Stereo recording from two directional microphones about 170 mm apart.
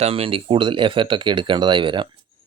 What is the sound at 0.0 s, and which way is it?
Speech, 35° right (ahead or behind).